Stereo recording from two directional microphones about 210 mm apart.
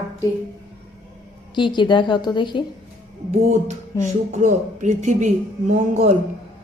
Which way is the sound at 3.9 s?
15° left (ahead or behind).